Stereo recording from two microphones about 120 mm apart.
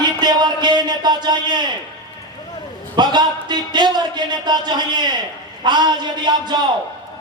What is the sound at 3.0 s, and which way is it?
A man's voice, 35° right (ahead or behind).